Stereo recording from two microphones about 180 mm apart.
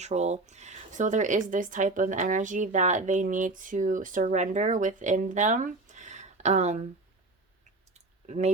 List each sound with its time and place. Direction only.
0.0 s speech: 40° right (ahead or behind)
7.9 s clicking: 40° right (ahead or behind)